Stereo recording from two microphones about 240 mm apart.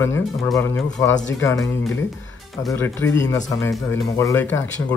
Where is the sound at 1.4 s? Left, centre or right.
Centre.